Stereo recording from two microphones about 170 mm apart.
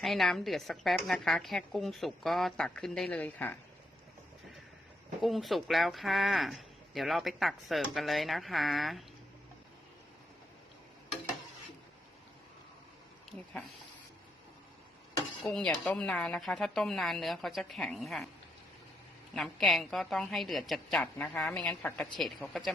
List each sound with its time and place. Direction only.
0.0 s speech: centre (ahead or behind)
5.2 s speech: centre (ahead or behind)
15.4 s speech: 5° left (ahead or behind)
19.3 s speech: centre (ahead or behind)